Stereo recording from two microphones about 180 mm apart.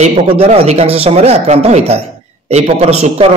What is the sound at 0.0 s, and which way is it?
A man's voice, 35° right (ahead or behind).